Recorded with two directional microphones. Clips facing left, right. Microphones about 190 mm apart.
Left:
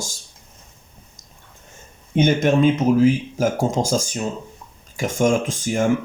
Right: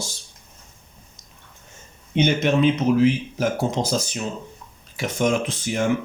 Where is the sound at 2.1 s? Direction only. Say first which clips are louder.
Left 3 dB; 50° left (ahead or behind).